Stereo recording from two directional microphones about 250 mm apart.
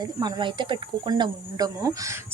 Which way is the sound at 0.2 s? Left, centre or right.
Centre.